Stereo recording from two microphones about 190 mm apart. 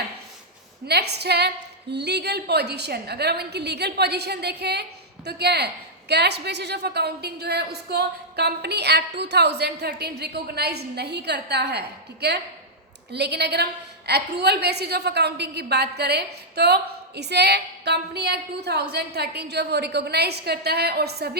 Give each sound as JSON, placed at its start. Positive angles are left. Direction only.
{"t": 0.9, "sound": "a woman's voice", "side_deg": -60}